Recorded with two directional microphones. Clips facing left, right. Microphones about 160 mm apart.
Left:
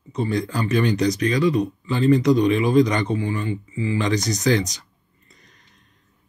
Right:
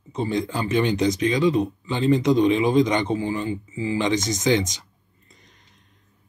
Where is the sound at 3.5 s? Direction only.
35° right (ahead or behind).